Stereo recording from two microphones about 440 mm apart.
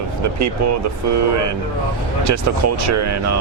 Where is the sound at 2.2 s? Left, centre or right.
Right.